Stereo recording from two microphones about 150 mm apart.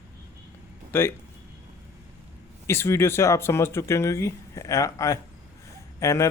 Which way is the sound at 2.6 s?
15° left (ahead or behind).